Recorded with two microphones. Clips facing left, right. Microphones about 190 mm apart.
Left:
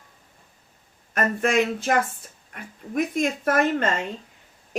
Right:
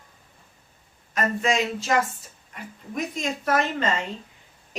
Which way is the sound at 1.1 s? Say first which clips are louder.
Left 2 dB; 55° left (ahead or behind).